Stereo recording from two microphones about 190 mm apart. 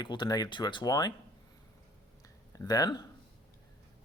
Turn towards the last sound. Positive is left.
turn(degrees=20)  # may be behind; listen again after turning